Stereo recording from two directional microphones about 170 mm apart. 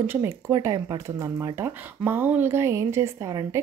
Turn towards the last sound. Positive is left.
turn(degrees=-20)  # may be behind; listen again after turning